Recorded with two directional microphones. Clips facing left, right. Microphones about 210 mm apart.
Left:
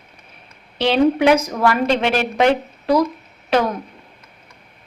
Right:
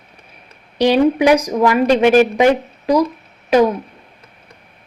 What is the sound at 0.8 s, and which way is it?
A woman's voice, 15° right (ahead or behind).